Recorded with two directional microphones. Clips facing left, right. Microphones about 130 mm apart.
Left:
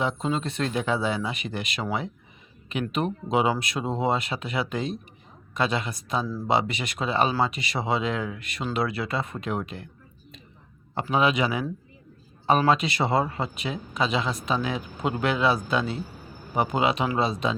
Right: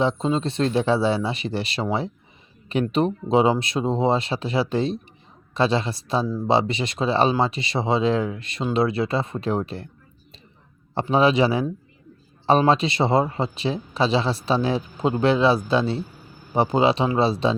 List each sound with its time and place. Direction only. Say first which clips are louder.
0.0 s speech: right 5 dB; 25° right (ahead or behind)
6.2 s speech: right 4 dB; 20° right (ahead or behind); by 9.9 s 35° right (ahead or behind)
10.9 s a man's voice: right 5 dB; 30° right (ahead or behind)